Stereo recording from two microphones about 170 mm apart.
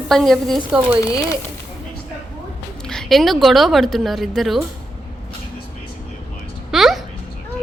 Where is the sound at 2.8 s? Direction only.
Centre (ahead or behind).